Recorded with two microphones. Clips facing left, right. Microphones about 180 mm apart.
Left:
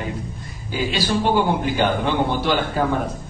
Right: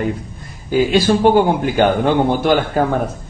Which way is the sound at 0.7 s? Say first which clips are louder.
Right 8 dB; 50° right (ahead or behind).